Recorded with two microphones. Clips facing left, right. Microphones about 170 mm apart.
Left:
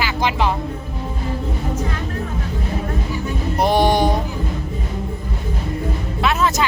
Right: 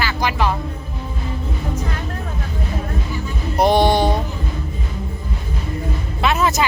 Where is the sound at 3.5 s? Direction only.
5° left (ahead or behind).